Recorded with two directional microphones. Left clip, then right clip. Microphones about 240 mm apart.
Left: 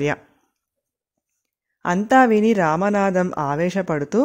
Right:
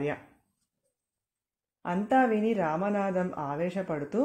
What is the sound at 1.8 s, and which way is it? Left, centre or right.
Speech, left.